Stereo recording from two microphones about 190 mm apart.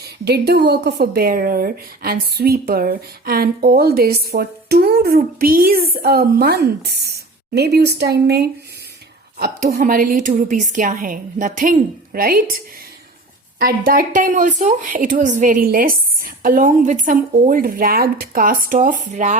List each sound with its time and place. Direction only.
0.0 s a woman's voice: 60° right (ahead or behind)
13.6 s a woman's voice: 50° right (ahead or behind)